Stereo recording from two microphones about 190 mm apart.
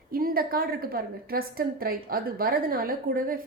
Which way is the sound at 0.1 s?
50° right (ahead or behind).